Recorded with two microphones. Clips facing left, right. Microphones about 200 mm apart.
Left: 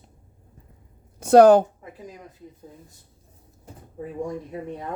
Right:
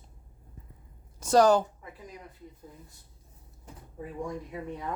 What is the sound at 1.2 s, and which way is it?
Speech, 60° left (ahead or behind).